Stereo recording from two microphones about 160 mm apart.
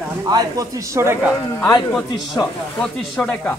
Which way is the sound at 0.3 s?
20° right (ahead or behind).